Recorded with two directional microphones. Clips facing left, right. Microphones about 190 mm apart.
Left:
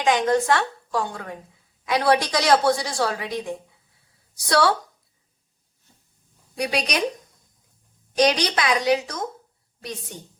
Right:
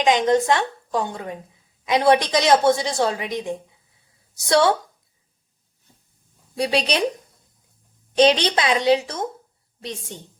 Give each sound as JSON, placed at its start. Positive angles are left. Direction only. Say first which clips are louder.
{"t": 0.0, "sound": "a woman's voice", "louder": "right 2 dB", "side_deg": -20}
{"t": 6.6, "sound": "a woman's voice", "louder": "right 3 dB", "side_deg": -30}
{"t": 8.1, "sound": "a woman's voice", "louder": "right 3 dB", "side_deg": -25}